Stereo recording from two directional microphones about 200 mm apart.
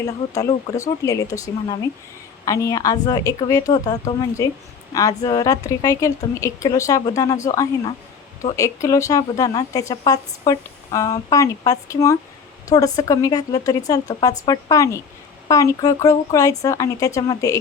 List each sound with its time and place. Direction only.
0.0 s speech: 15° left (ahead or behind)